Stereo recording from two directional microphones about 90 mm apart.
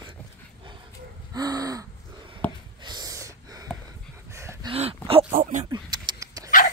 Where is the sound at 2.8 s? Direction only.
50° right (ahead or behind).